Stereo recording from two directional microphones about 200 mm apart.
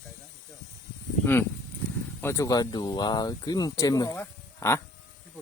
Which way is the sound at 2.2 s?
15° left (ahead or behind).